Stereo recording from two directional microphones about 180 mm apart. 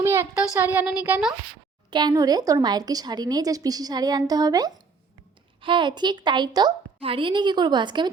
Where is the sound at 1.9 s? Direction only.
25° right (ahead or behind).